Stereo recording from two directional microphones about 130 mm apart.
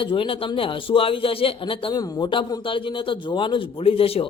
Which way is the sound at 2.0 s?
30° left (ahead or behind).